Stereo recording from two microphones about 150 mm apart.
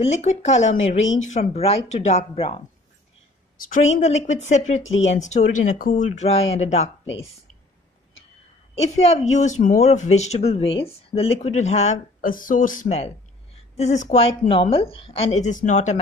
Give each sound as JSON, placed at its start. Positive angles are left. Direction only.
{"t": 0.0, "sound": "speech", "side_deg": 50}
{"t": 3.5, "sound": "speech", "side_deg": 60}
{"t": 6.0, "sound": "speech", "side_deg": 45}
{"t": 8.7, "sound": "speech", "side_deg": 45}
{"t": 12.8, "sound": "speech", "side_deg": 40}